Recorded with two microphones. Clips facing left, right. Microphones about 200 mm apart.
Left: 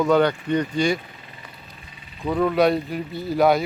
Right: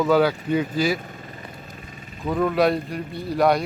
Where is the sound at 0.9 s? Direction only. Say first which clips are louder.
Right 3 dB; 45° right (ahead or behind).